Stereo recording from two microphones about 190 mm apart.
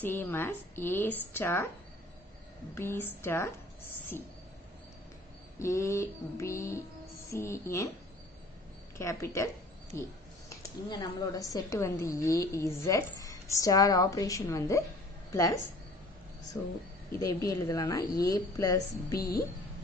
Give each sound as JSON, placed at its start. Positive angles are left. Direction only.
{"t": 0.0, "sound": "a woman's voice", "side_deg": 10}
{"t": 2.7, "sound": "a woman's voice", "side_deg": 10}
{"t": 5.6, "sound": "a woman's voice", "side_deg": 15}
{"t": 8.9, "sound": "a woman's voice", "side_deg": 15}
{"t": 16.5, "sound": "a woman's voice", "side_deg": 20}